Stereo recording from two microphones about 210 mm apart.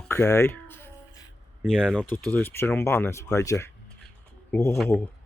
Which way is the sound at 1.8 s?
5° left (ahead or behind).